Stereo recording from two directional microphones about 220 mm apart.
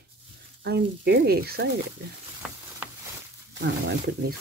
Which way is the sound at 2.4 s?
5° right (ahead or behind).